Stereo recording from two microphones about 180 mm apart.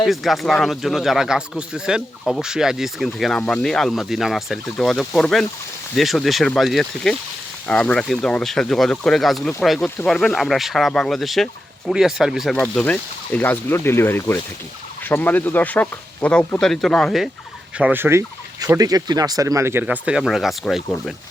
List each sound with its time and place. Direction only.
0.0 s speech: centre (ahead or behind)
17.7 s speech: 10° right (ahead or behind)